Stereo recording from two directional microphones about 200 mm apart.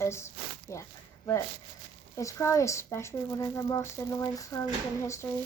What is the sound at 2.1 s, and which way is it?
Speech, 15° left (ahead or behind).